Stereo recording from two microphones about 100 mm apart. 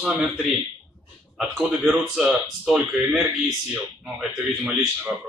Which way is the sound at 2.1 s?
Centre (ahead or behind).